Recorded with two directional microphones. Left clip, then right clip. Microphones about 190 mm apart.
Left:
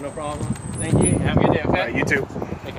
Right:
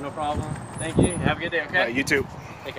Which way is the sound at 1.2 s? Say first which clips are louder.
Left 5 dB; 10° right (ahead or behind).